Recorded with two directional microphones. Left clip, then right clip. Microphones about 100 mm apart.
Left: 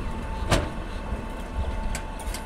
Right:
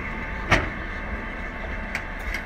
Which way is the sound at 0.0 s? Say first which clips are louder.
Right 4 dB; 45° left (ahead or behind).